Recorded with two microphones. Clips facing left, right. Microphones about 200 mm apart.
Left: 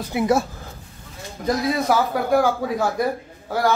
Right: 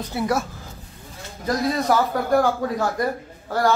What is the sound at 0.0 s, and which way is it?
Speech, 15° left (ahead or behind).